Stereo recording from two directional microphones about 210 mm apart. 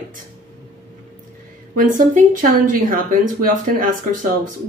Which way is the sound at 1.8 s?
40° right (ahead or behind).